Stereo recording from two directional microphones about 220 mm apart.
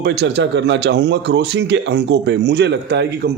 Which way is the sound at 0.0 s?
50° right (ahead or behind).